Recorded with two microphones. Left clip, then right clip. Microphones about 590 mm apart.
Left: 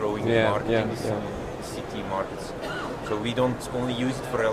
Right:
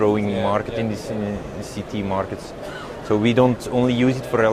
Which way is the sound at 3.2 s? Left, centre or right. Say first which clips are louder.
Right 9 dB; right.